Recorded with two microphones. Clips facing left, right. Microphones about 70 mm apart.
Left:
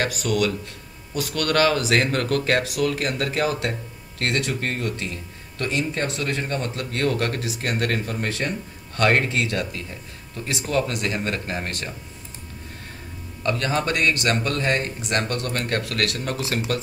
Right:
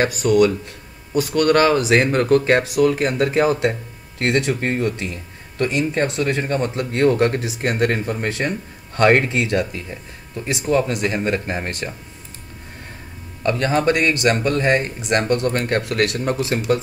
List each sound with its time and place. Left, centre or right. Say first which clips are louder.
0.0 s speech: right 7 dB; right
13.4 s speech: right 5 dB; right